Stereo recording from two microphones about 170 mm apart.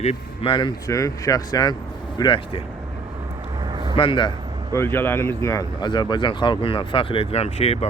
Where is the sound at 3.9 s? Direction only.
30° left (ahead or behind).